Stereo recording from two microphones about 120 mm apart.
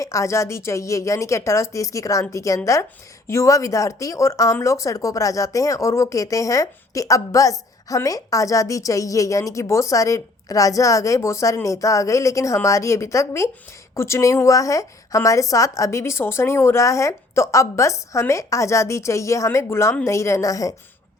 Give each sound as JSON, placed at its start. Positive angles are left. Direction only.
{"t": 0.0, "sound": "speech", "side_deg": 25}